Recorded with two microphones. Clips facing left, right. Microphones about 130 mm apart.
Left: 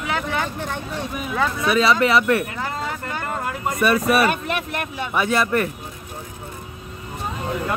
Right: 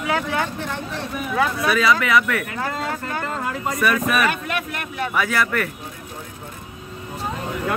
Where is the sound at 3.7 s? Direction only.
30° left (ahead or behind).